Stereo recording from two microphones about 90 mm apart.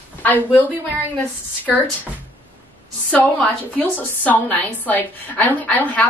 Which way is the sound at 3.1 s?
15° left (ahead or behind).